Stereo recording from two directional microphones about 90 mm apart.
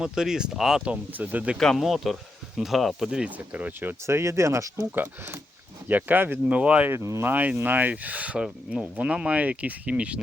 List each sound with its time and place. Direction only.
0.0 s speech: 5° right (ahead or behind)
1.1 s speech: 20° right (ahead or behind)
1.5 s speech: 5° left (ahead or behind); by 4.9 s 35° right (ahead or behind)
4.9 s speech: 20° right (ahead or behind)
6.9 s speech: 30° right (ahead or behind); by 10.2 s 15° right (ahead or behind)